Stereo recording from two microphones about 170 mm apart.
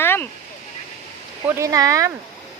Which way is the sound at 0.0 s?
15° left (ahead or behind).